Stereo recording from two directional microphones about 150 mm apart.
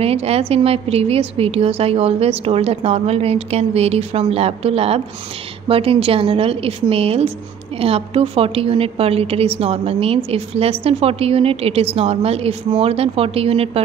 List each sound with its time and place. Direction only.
0.0 s a woman's voice: 40° right (ahead or behind)